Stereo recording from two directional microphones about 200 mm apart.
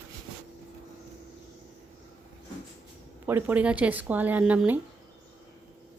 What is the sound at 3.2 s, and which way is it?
Speech, 10° right (ahead or behind).